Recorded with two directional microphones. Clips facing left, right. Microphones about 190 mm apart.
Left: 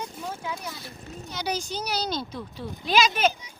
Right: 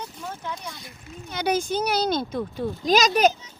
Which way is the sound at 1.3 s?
55° right (ahead or behind).